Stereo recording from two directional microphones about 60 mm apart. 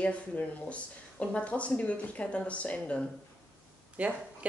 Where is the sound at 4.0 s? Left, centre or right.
Right.